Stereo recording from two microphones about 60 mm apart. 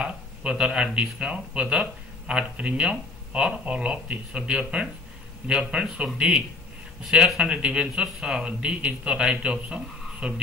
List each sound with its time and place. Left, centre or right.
0.0 s speech: centre